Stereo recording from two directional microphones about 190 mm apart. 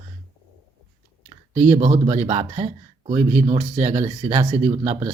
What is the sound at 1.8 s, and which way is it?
Speech, 35° right (ahead or behind).